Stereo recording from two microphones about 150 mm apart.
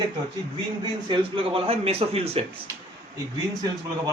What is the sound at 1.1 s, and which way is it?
Speech, 35° right (ahead or behind).